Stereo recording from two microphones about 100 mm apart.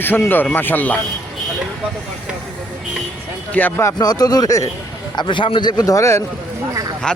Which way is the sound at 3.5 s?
15° left (ahead or behind).